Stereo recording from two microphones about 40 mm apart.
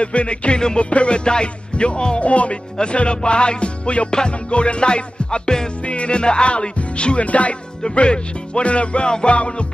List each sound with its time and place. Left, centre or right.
0.0 s speech: left